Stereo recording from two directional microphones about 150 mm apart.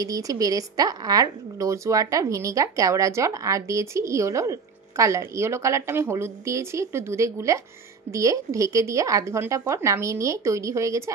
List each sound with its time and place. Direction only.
0.0 s a woman's voice: 25° right (ahead or behind)